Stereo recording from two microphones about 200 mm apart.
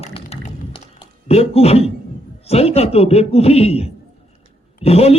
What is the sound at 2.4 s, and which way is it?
A man's voice, 30° left (ahead or behind).